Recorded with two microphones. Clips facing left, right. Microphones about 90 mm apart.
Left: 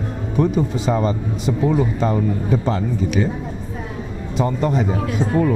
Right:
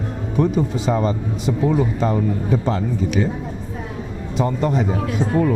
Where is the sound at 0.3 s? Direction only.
20° left (ahead or behind).